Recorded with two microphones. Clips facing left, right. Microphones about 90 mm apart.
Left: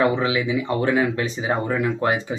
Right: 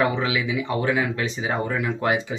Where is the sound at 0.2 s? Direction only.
35° left (ahead or behind).